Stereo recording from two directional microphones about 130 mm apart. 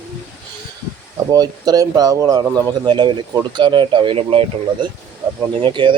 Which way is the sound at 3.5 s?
35° right (ahead or behind).